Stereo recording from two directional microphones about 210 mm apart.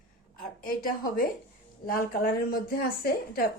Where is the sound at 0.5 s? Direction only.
45° left (ahead or behind).